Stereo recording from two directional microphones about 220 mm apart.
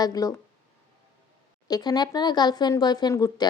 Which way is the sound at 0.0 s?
15° left (ahead or behind).